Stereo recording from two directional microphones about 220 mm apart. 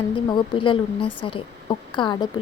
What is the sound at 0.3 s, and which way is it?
A woman's voice, 20° left (ahead or behind).